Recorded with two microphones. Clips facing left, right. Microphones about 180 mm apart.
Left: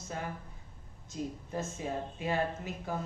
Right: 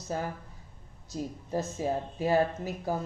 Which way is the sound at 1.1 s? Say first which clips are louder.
Right 4 dB; 35° right (ahead or behind).